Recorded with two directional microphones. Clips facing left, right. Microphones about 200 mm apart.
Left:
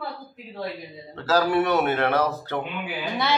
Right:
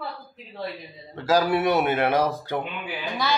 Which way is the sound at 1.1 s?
15° right (ahead or behind).